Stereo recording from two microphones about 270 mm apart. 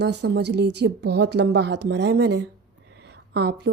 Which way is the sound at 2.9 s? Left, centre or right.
Right.